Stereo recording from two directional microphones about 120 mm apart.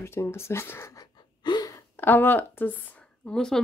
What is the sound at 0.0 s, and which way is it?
Speech, 20° left (ahead or behind).